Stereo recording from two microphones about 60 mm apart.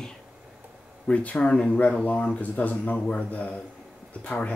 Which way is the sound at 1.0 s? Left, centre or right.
Centre.